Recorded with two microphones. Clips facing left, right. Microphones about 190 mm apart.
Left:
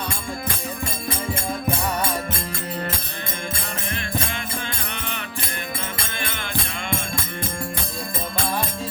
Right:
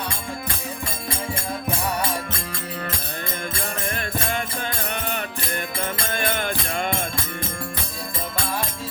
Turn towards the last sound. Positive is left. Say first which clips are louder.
# right 2 dB
turn(degrees=-45)  # may be behind; listen again after turning